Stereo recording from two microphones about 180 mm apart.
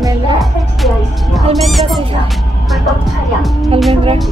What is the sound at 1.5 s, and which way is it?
Speech, centre (ahead or behind).